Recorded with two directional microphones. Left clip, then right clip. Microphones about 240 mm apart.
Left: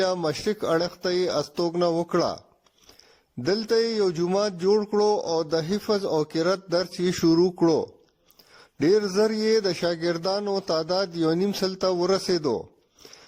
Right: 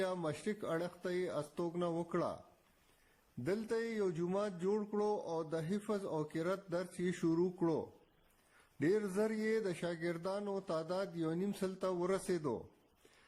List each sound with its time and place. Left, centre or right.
0.0 s a man's voice: left
3.4 s a man's voice: left